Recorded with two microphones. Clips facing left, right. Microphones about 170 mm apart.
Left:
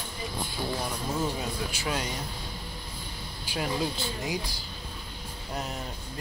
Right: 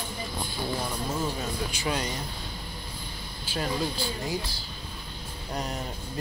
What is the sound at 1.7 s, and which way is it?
Speech, 5° left (ahead or behind).